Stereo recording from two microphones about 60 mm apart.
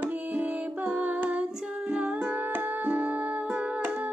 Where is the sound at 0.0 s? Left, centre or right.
Right.